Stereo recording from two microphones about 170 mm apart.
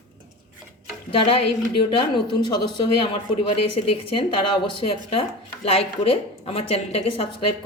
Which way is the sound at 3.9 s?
35° left (ahead or behind).